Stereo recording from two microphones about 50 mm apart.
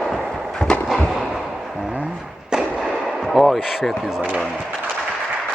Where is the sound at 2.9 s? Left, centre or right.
Centre.